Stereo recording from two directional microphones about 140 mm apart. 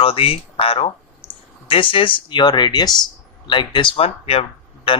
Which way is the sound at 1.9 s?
35° left (ahead or behind).